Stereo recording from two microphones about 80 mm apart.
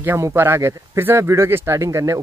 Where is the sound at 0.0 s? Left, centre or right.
Right.